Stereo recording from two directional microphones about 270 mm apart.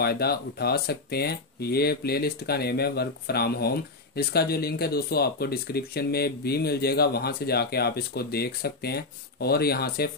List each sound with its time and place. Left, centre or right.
0.0 s speech: left